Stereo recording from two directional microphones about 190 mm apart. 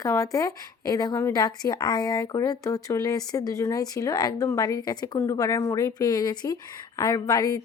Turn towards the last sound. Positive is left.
turn(degrees=20)  # may be behind; listen again after turning